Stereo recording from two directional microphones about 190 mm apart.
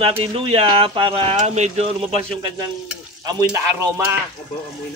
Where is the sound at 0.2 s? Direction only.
30° right (ahead or behind).